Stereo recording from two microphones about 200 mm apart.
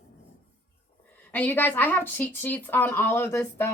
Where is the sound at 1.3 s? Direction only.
10° left (ahead or behind).